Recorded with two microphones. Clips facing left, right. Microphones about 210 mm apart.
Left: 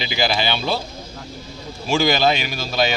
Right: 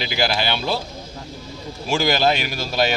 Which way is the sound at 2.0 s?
10° right (ahead or behind).